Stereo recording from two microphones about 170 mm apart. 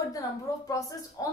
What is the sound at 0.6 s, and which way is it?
Speech, 20° left (ahead or behind).